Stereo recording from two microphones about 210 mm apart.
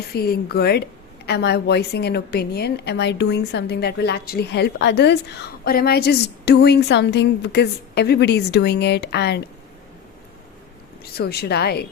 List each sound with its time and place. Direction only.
0.1 s a woman's voice: 50° left (ahead or behind)
11.0 s a woman's voice: 50° left (ahead or behind)